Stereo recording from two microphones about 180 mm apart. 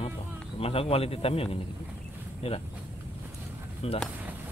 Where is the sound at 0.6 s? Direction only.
35° left (ahead or behind).